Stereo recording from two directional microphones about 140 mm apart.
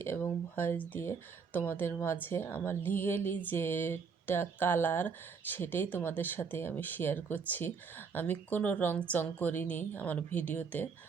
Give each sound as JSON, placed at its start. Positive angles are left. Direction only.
{"t": 0.0, "sound": "a woman's voice", "side_deg": 15}